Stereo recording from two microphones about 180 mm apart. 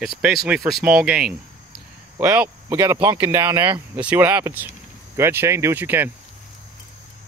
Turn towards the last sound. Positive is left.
turn(degrees=-10)  # may be behind; listen again after turning